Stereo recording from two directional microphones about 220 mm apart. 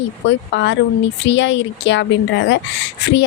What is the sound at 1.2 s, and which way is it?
Speech, 55° left (ahead or behind).